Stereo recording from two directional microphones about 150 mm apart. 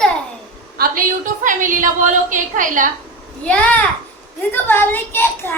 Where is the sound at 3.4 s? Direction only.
10° left (ahead or behind).